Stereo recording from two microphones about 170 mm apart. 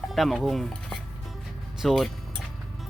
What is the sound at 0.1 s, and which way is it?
Speech, centre (ahead or behind).